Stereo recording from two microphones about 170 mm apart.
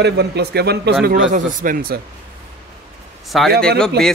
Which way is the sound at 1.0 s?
60° right (ahead or behind).